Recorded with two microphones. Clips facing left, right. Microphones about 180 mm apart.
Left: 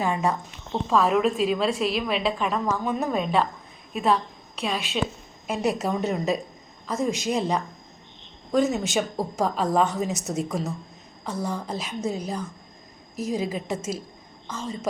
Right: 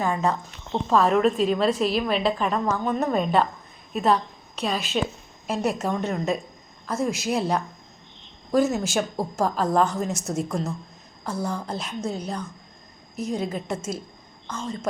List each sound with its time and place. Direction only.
0.0 s a woman's voice: 10° left (ahead or behind)